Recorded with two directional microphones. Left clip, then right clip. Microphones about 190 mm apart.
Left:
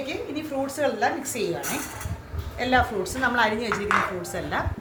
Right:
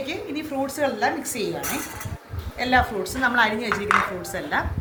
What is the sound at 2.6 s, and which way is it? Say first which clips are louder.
Speech: right 2 dB; 20° left (ahead or behind).